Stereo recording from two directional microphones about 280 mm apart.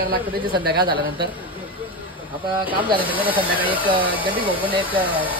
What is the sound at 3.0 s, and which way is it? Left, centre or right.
Speech, centre.